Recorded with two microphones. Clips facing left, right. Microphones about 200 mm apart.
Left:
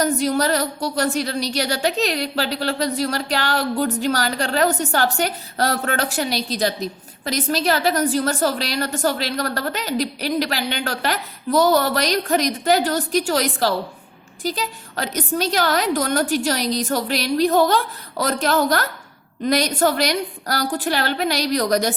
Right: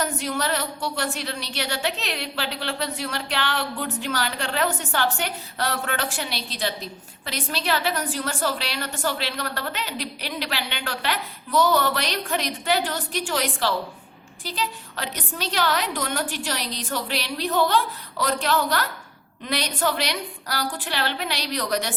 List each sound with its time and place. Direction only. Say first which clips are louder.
0.0 s a woman's voice: left 7 dB; 40° left (ahead or behind)